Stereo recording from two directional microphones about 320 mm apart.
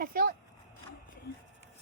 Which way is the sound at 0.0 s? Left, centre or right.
Right.